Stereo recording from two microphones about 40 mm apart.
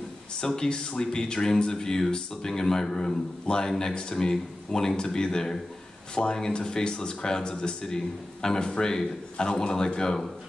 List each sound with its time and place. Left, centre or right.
0.4 s a man's voice: centre